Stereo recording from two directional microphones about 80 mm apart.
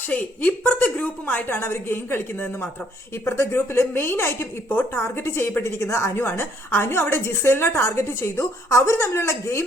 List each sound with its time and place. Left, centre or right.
0.1 s a woman's voice: centre; by 9.6 s left